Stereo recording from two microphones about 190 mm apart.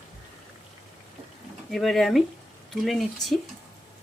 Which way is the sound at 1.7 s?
Centre (ahead or behind).